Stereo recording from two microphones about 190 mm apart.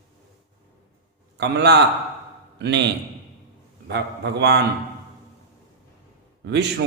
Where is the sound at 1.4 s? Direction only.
60° right (ahead or behind).